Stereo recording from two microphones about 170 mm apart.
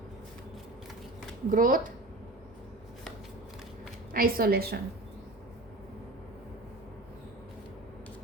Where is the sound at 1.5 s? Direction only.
55° right (ahead or behind).